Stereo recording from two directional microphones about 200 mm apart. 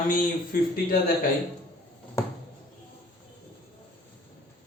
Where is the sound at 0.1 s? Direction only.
45° left (ahead or behind).